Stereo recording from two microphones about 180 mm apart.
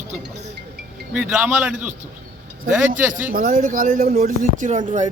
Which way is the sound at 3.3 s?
50° right (ahead or behind).